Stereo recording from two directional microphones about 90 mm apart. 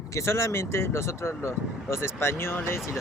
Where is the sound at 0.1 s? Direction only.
30° left (ahead or behind).